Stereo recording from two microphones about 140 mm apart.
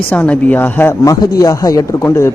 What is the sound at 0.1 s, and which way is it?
Speech, 10° left (ahead or behind).